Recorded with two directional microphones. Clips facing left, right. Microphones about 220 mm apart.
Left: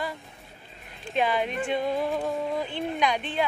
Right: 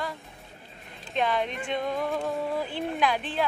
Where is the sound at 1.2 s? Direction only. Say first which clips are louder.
Left 1 dB; 5° left (ahead or behind).